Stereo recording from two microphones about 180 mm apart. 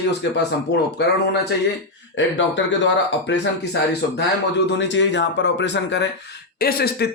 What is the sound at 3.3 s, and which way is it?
Speech, 70° left (ahead or behind).